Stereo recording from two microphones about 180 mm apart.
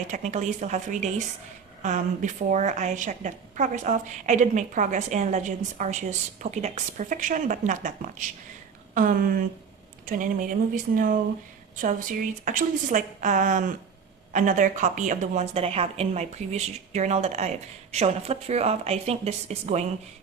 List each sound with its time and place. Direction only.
0.1 s a woman's voice: 40° right (ahead or behind)